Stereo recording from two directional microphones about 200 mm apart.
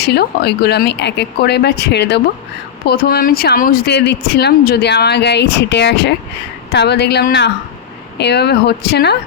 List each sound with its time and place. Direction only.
0.0 s speech: 55° left (ahead or behind)